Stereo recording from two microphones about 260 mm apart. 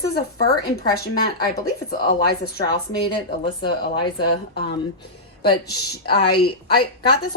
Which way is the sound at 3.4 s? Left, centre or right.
Centre.